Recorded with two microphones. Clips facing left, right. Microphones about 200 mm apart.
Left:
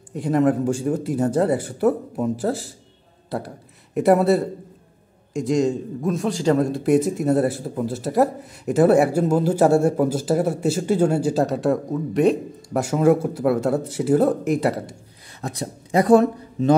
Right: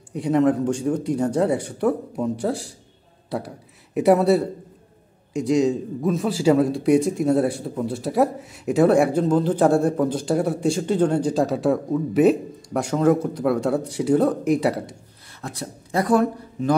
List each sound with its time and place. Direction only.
0.1 s a man's voice: centre (ahead or behind)
15.4 s speech: 20° left (ahead or behind)